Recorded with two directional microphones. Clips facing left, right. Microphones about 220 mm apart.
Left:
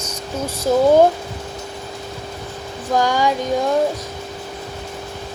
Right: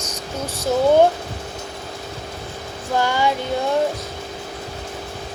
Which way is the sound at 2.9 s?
15° left (ahead or behind).